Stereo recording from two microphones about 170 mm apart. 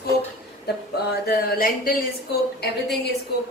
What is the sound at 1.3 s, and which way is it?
Speech, 60° left (ahead or behind).